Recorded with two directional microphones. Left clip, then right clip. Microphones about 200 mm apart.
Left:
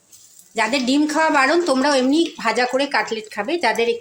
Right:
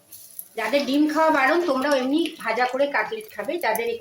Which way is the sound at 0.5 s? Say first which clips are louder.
Left 3 dB; 50° left (ahead or behind).